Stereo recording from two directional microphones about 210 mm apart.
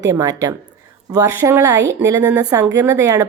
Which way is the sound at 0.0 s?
15° right (ahead or behind).